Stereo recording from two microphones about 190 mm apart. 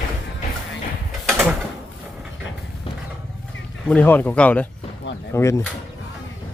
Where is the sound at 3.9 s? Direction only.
10° left (ahead or behind).